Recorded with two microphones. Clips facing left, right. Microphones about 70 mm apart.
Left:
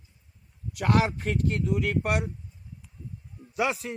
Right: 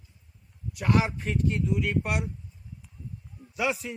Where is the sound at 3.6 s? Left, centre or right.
Left.